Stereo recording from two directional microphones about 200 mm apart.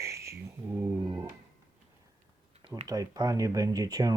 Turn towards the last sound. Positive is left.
turn(degrees=-20)  # may be behind; listen again after turning